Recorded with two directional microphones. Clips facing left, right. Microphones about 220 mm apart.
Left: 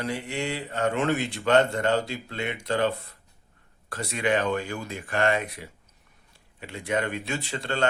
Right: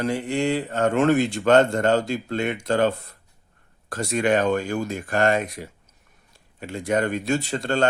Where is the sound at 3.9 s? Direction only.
45° right (ahead or behind).